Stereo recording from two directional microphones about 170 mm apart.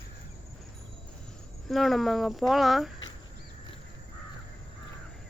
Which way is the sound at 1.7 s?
Centre (ahead or behind).